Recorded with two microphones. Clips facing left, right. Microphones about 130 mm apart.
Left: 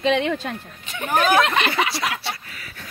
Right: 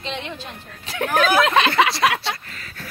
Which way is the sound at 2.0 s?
70° right (ahead or behind).